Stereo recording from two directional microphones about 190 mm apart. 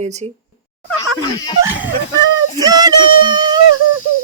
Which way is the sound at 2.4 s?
20° right (ahead or behind).